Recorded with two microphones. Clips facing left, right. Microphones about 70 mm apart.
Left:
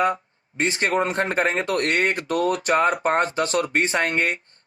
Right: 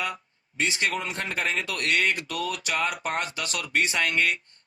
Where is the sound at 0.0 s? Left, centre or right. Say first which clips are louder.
Left 10 dB; left.